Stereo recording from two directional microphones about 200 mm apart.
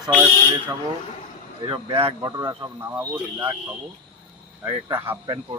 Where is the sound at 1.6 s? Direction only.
25° right (ahead or behind).